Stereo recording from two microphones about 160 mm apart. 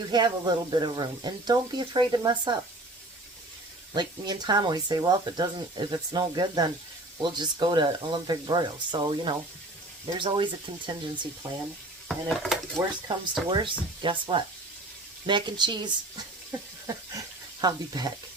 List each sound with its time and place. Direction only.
0.1 s speech: 25° right (ahead or behind)
3.9 s speech: 25° right (ahead or behind)
12.0 s stir: centre (ahead or behind)
12.8 s speech: 10° right (ahead or behind)
13.5 s speech: 30° right (ahead or behind)